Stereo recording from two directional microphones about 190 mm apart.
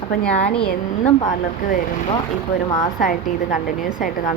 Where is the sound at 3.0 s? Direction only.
45° left (ahead or behind).